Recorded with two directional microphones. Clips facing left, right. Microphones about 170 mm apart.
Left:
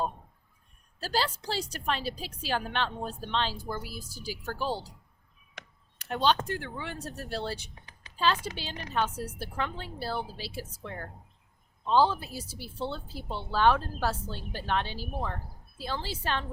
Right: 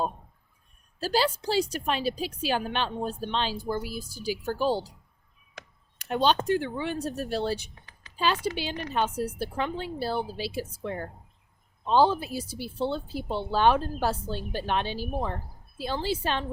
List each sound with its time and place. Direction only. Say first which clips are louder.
0.9 s a woman's voice: right 5 dB; 15° right (ahead or behind)
6.0 s a woman's voice: right 3 dB; 15° right (ahead or behind)